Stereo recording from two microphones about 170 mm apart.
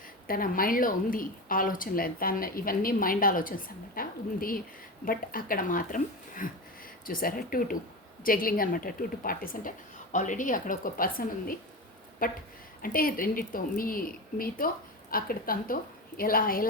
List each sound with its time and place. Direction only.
0.3 s a woman's voice: 55° left (ahead or behind)